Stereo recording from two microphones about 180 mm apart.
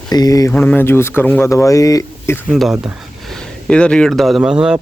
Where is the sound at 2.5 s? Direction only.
Centre (ahead or behind).